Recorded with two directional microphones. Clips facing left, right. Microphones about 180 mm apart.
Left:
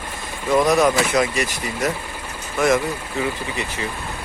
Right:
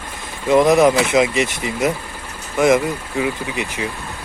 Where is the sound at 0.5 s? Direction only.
20° right (ahead or behind).